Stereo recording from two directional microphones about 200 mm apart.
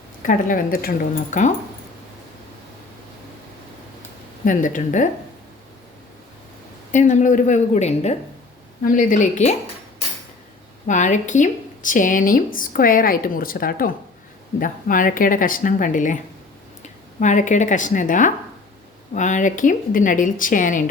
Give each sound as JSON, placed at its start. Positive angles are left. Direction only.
{"t": 0.2, "sound": "a woman's voice", "side_deg": 40}
{"t": 4.4, "sound": "a woman's voice", "side_deg": 40}
{"t": 6.9, "sound": "a woman's voice", "side_deg": 40}
{"t": 10.8, "sound": "speech", "side_deg": 35}
{"t": 17.2, "sound": "a woman's voice", "side_deg": 40}